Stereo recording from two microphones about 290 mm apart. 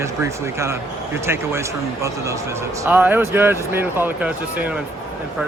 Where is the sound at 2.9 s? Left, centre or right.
Centre.